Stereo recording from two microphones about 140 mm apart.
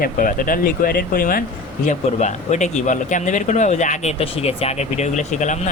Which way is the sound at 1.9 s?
55° left (ahead or behind).